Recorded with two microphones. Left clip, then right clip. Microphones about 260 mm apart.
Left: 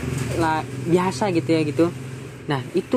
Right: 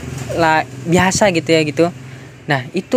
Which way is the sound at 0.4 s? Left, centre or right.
Right.